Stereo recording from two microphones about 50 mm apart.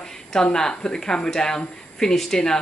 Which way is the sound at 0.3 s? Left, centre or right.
Centre.